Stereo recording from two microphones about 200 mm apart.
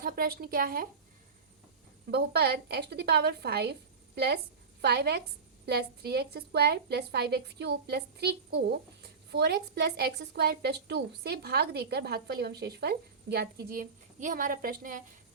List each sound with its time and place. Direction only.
0.0 s a woman's voice: 45° right (ahead or behind)
2.0 s a woman's voice: 50° right (ahead or behind)